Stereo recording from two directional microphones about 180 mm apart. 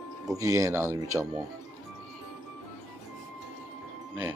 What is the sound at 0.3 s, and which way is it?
Speech, 15° right (ahead or behind).